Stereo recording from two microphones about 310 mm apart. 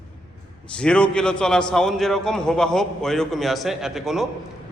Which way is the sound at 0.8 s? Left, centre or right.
Centre.